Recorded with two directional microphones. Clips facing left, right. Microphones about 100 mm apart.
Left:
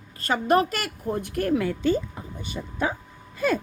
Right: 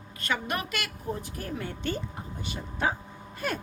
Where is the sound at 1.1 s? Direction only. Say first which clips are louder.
Left 12 dB; 65° left (ahead or behind); by 1.8 s 90° left.